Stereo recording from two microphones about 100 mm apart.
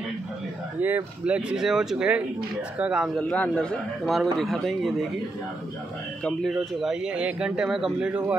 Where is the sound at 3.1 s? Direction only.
10° left (ahead or behind).